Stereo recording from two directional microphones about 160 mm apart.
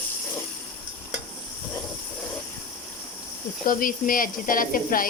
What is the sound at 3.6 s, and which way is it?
Speech, 60° left (ahead or behind).